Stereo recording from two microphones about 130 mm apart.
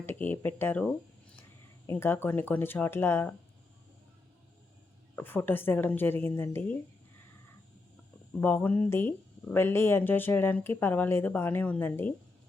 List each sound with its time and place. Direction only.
0.0 s speech: 15° left (ahead or behind)
1.9 s speech: 20° left (ahead or behind)
5.1 s speech: 15° left (ahead or behind)
8.3 s speech: 15° left (ahead or behind)